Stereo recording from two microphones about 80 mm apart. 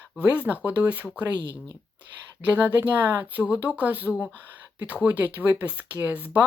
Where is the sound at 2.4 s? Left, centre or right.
Right.